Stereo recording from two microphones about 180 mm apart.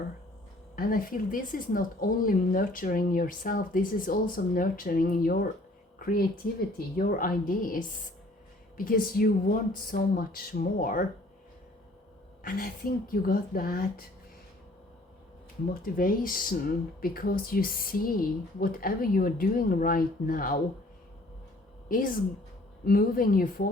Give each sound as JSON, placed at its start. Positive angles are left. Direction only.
{"t": 0.8, "sound": "speech", "side_deg": 50}
{"t": 6.7, "sound": "speech", "side_deg": 50}
{"t": 12.4, "sound": "speech", "side_deg": 50}
{"t": 15.7, "sound": "speech", "side_deg": 55}
{"t": 21.8, "sound": "speech", "side_deg": 50}